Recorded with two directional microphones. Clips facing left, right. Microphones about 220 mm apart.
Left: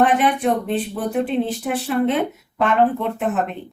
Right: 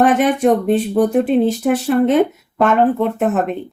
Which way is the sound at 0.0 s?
45° right (ahead or behind).